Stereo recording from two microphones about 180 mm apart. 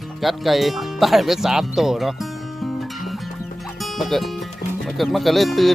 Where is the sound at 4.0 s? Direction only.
Centre (ahead or behind).